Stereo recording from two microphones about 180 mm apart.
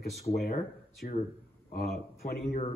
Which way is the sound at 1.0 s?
55° left (ahead or behind).